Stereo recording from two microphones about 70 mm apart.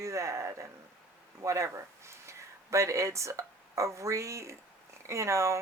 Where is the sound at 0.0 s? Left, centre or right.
Right.